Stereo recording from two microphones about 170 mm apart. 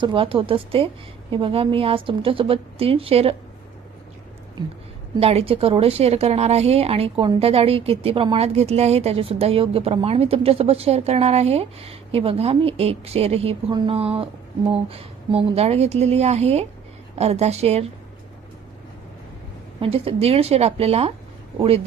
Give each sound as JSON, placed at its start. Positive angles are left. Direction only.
{"t": 0.0, "sound": "a woman's voice", "side_deg": -30}
{"t": 5.1, "sound": "a woman's voice", "side_deg": -35}
{"t": 19.8, "sound": "a woman's voice", "side_deg": -35}